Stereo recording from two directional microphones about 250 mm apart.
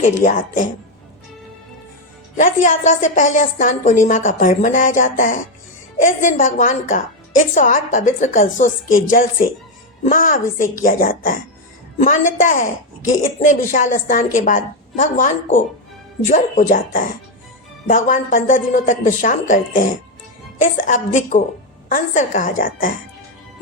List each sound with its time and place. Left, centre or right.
0.2 s speech: left
2.3 s speech: left
16.3 s speech: left